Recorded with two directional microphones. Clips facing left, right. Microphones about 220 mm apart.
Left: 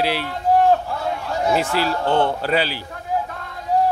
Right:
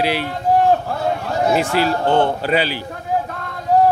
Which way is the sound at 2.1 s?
15° right (ahead or behind).